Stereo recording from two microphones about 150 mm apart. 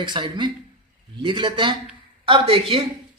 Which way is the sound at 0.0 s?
30° right (ahead or behind).